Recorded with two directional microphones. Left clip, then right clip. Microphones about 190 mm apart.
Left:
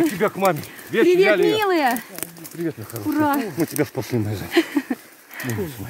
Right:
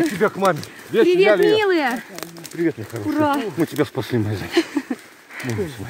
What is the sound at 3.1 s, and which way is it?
Speech, 55° left (ahead or behind).